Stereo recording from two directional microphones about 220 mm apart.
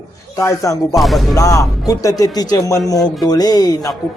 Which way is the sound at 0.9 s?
Centre (ahead or behind).